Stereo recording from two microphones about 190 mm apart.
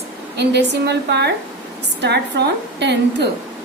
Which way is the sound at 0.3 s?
65° right (ahead or behind).